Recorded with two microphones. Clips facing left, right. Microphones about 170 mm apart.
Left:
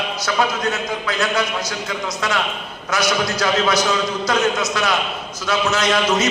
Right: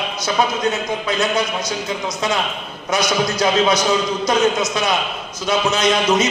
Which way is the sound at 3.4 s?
20° right (ahead or behind).